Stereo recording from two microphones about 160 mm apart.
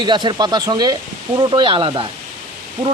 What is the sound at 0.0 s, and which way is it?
Speech, 30° right (ahead or behind).